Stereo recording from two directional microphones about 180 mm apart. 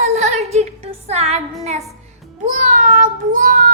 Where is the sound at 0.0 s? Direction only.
40° right (ahead or behind).